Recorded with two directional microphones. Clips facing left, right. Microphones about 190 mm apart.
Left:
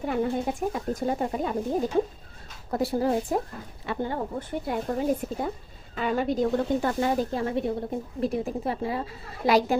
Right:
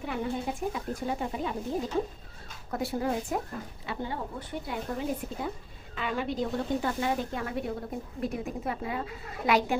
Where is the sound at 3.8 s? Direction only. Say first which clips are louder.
Left 6 dB; 50° left (ahead or behind).